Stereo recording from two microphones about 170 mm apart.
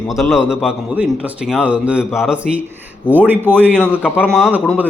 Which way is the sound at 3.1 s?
10° right (ahead or behind).